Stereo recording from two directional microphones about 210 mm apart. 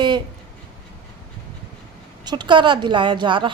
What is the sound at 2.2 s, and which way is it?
A woman's voice, 20° right (ahead or behind).